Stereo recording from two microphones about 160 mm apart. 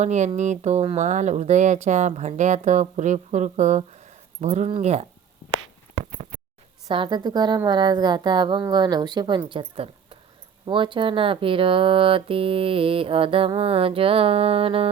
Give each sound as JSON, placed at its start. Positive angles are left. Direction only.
{"t": 0.0, "sound": "speech", "side_deg": -45}
{"t": 6.8, "sound": "a woman's voice", "side_deg": -30}